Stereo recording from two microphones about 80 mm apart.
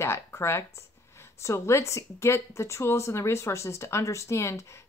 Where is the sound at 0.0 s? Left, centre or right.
Left.